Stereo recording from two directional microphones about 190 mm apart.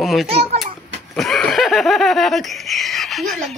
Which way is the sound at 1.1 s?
Centre (ahead or behind).